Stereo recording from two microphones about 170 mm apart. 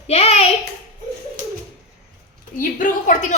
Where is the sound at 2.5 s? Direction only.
50° left (ahead or behind).